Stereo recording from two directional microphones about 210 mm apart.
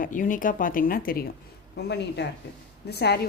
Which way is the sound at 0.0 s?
40° left (ahead or behind).